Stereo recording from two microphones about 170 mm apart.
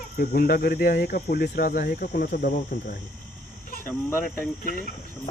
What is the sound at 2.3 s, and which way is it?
Speech, 50° left (ahead or behind).